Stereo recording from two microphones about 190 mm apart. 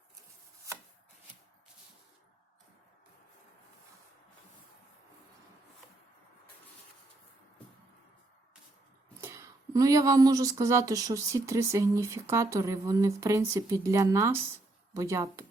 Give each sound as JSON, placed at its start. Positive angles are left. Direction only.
{"t": 9.2, "sound": "speech", "side_deg": -15}